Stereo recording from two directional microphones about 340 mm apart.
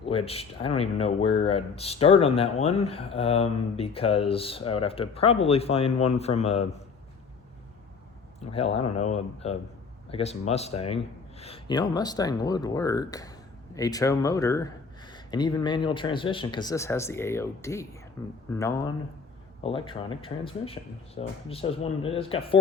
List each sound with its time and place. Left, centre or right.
0.0 s speech: centre
8.4 s speech: centre